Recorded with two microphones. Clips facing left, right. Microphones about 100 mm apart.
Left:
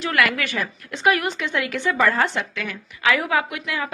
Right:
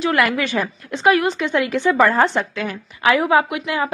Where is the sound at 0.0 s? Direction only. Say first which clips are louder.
Right 4 dB; 25° right (ahead or behind).